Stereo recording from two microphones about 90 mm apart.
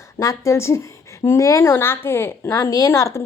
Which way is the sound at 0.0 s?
35° left (ahead or behind).